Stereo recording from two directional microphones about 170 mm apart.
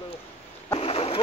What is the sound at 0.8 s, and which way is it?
Splash, 35° left (ahead or behind).